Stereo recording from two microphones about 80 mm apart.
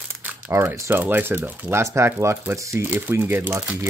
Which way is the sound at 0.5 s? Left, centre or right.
Right.